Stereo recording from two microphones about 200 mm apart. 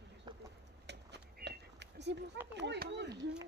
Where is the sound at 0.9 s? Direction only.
60° right (ahead or behind).